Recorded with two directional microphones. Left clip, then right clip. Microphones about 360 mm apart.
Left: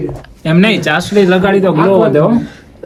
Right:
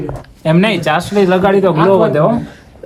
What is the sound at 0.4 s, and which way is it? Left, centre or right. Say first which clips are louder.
A man's voice: left 1 dB; right.